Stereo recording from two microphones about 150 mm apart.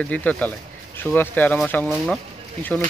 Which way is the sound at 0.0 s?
10° left (ahead or behind).